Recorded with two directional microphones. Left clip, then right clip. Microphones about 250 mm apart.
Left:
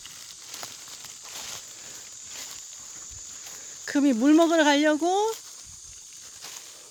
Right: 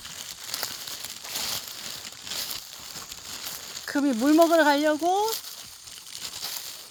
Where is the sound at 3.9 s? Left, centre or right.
Left.